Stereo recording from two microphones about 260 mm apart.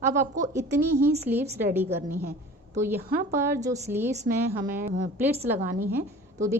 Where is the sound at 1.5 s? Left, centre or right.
Centre.